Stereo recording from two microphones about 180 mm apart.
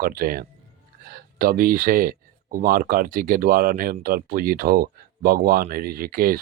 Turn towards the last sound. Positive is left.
turn(degrees=-55)  # may be behind; listen again after turning